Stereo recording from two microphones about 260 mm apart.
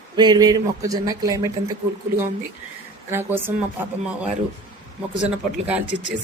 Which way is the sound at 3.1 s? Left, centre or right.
Centre.